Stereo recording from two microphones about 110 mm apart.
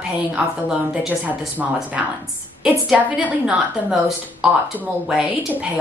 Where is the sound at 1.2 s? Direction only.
15° right (ahead or behind).